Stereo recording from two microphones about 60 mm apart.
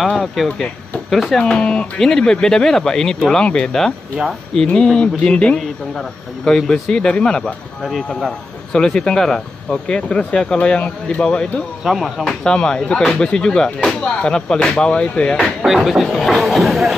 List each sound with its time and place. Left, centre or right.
0.1 s speech: centre
1.4 s speech: centre
5.6 s speech: centre
11.8 s speech: centre
12.4 s speech: centre
15.6 s speech: centre